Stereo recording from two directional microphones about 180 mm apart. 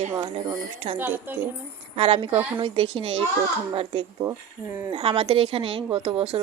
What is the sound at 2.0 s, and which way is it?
A woman's voice, 30° right (ahead or behind).